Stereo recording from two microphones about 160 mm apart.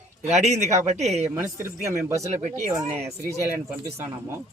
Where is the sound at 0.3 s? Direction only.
45° right (ahead or behind).